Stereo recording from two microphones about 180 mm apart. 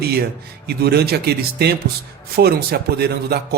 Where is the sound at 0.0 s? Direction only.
60° right (ahead or behind).